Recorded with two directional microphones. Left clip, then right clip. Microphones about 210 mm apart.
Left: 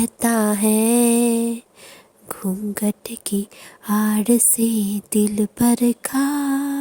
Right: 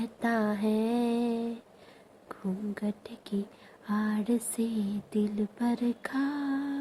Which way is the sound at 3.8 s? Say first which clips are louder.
Left 12 dB; 55° left (ahead or behind).